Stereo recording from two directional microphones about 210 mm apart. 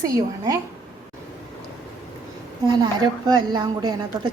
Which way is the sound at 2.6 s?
20° right (ahead or behind).